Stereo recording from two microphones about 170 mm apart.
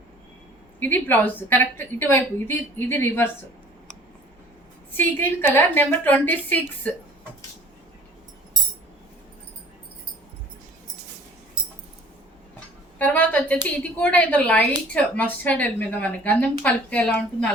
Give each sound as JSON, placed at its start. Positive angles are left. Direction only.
{"t": 0.8, "sound": "a woman's voice", "side_deg": 10}
{"t": 4.9, "sound": "a woman's voice", "side_deg": 15}
{"t": 13.0, "sound": "a sound", "side_deg": 10}
{"t": 13.7, "sound": "a woman's voice", "side_deg": 10}